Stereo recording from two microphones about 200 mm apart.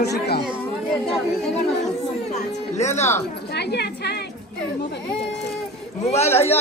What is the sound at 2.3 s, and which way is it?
Speech, 35° left (ahead or behind).